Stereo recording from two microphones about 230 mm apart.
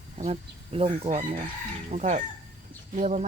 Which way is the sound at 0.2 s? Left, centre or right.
Right.